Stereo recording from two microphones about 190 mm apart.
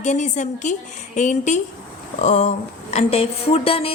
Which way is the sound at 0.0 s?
40° left (ahead or behind).